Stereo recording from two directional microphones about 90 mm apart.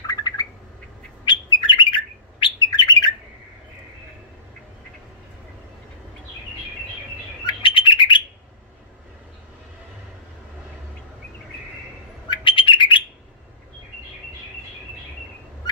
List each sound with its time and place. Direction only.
0.0 s bird: 45° left (ahead or behind)
1.2 s bird: 65° left (ahead or behind)
2.4 s bird: 50° left (ahead or behind)
7.4 s bird: 65° left (ahead or behind)
12.3 s bird: 65° left (ahead or behind)